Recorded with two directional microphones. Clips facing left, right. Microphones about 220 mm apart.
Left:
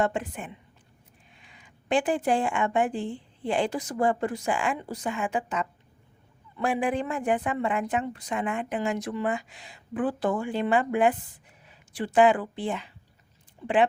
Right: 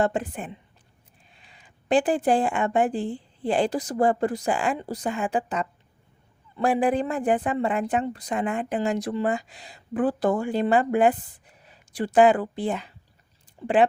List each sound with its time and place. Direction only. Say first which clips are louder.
0.0 s a woman's voice: right 3 dB; 35° right (ahead or behind)